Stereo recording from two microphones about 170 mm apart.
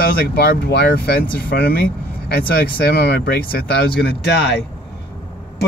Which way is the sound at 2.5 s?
70° left (ahead or behind).